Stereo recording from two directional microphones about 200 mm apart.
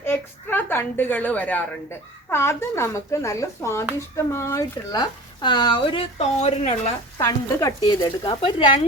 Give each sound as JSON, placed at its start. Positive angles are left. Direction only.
{"t": 0.0, "sound": "a woman's voice", "side_deg": 10}
{"t": 7.2, "sound": "speech", "side_deg": 15}